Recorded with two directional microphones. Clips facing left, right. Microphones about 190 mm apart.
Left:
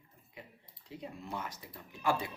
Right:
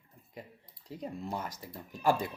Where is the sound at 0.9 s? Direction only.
40° right (ahead or behind).